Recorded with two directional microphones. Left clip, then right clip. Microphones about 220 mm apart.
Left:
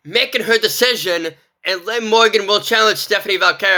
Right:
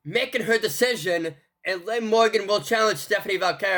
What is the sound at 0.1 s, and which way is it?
Speech, 10° right (ahead or behind).